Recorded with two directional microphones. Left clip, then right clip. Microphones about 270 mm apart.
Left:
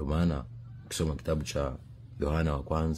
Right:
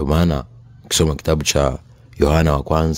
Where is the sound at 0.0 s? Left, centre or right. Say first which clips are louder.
Right 13 dB; right.